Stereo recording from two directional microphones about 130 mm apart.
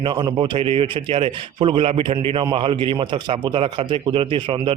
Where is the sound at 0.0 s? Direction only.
35° right (ahead or behind).